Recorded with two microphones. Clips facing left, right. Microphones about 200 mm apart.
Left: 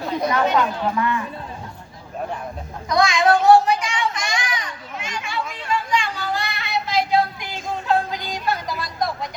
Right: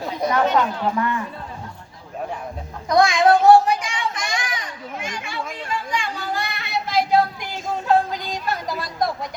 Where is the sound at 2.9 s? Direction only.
55° right (ahead or behind).